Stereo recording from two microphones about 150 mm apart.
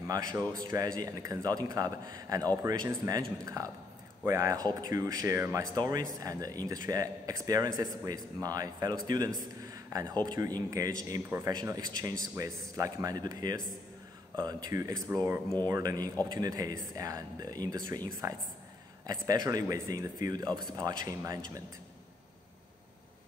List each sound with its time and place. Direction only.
0.0 s speech: 25° right (ahead or behind)